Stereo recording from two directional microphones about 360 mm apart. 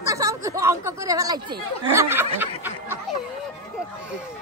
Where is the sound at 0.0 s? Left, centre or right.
Centre.